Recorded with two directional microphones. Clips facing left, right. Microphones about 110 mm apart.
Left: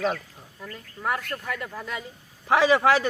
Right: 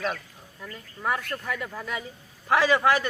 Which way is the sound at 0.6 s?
Centre (ahead or behind).